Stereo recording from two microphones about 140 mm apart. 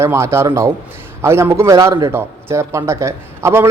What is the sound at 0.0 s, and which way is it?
A man's voice, 20° right (ahead or behind).